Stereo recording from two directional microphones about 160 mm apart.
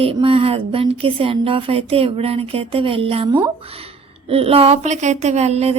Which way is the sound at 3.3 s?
25° right (ahead or behind).